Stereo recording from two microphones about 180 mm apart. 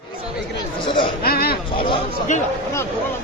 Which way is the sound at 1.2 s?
55° left (ahead or behind).